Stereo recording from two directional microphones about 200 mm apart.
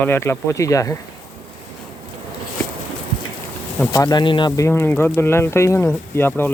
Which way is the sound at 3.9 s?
20° left (ahead or behind).